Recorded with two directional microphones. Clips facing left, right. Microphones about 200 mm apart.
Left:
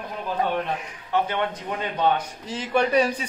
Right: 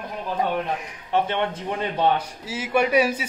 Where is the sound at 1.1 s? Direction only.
25° right (ahead or behind).